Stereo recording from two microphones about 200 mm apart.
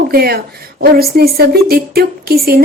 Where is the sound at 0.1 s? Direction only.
50° right (ahead or behind).